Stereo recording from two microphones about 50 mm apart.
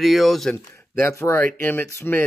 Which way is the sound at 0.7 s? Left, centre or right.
Left.